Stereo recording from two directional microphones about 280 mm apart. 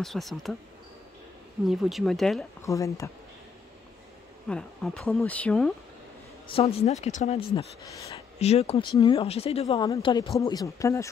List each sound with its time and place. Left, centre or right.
0.0 s speech: centre
1.7 s speech: centre
4.5 s speech: centre
6.5 s speech: left
8.4 s speech: left